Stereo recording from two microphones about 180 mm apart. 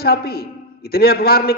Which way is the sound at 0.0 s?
60° left (ahead or behind).